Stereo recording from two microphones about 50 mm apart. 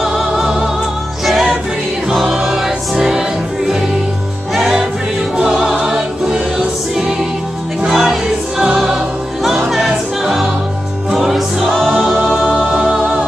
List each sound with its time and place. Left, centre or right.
0.0 s music: centre
2.1 s choir: centre
5.4 s music: centre
7.8 s music: centre
11.7 s music: centre
12.9 s music: centre